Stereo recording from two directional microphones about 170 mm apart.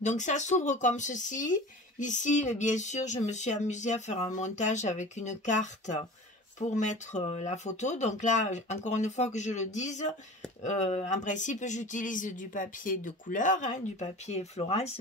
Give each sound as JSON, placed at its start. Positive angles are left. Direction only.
{"t": 0.0, "sound": "speech", "side_deg": 45}